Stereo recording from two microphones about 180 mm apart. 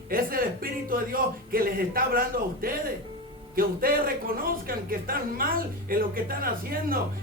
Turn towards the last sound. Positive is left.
turn(degrees=-55)  # may be behind; listen again after turning